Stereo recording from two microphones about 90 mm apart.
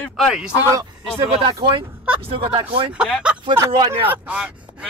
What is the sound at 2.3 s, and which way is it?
Speech, 85° right.